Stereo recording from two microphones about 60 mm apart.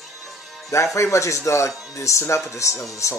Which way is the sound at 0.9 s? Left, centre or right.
Left.